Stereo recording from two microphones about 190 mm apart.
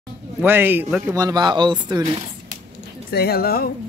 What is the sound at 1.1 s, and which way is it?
Speech, 20° right (ahead or behind).